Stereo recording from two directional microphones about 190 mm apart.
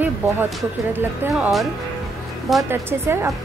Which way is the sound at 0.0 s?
10° right (ahead or behind).